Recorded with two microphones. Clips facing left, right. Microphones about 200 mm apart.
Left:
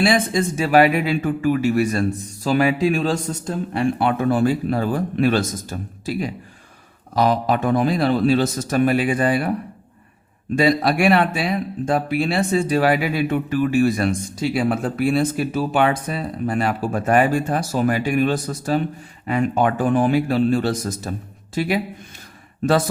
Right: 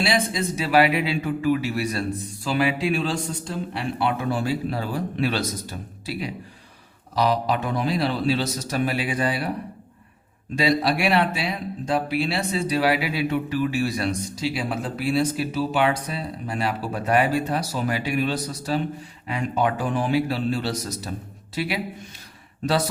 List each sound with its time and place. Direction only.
0.0 s speech: 50° left (ahead or behind)
10.5 s speech: 50° left (ahead or behind)